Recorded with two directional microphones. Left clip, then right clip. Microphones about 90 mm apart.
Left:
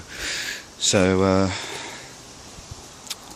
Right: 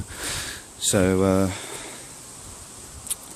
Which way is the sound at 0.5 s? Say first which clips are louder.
Left 3 dB; 35° right (ahead or behind).